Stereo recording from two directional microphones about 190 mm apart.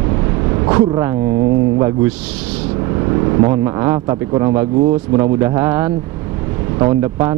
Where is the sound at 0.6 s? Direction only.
20° right (ahead or behind).